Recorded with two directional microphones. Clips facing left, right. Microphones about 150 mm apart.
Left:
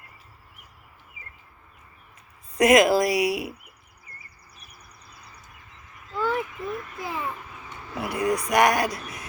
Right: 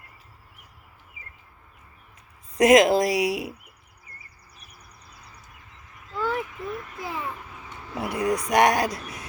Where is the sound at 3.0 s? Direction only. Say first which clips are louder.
Even; 90° right.